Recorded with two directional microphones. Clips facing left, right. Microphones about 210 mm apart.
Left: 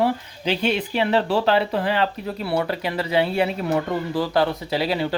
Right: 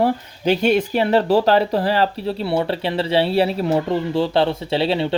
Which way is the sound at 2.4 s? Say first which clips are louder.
Right 2 dB; 25° right (ahead or behind).